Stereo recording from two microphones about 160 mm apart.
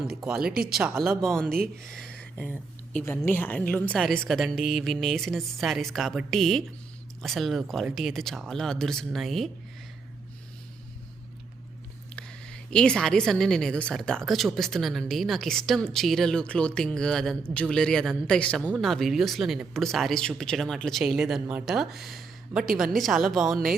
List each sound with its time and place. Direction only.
0.3 s a woman's voice: 5° right (ahead or behind)
1.5 s speech: 65° right (ahead or behind)
1.9 s a sound: 5° left (ahead or behind)
3.0 s a woman's voice: 15° left (ahead or behind)
12.1 s a woman's voice: 5° left (ahead or behind)